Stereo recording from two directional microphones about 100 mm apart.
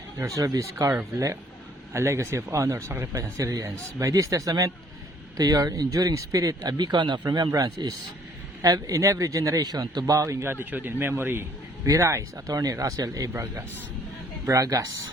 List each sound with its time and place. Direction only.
0.2 s speech: 35° right (ahead or behind)
10.1 s speech: 30° right (ahead or behind)